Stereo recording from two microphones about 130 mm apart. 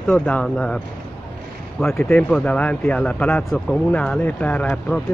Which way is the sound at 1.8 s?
5° left (ahead or behind).